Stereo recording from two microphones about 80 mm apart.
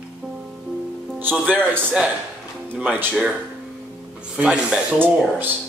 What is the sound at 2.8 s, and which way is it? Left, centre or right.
Speech, centre.